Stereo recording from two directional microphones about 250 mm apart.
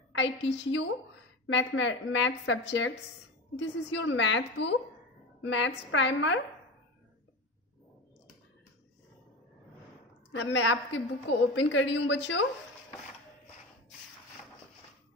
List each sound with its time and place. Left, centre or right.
0.1 s a woman's voice: left
10.3 s a woman's voice: left